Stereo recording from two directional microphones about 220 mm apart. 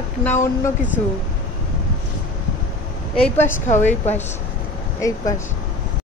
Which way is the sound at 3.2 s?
10° left (ahead or behind).